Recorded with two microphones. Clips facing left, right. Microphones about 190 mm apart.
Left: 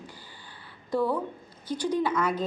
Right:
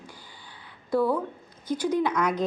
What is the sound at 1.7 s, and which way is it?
Speech, 10° right (ahead or behind).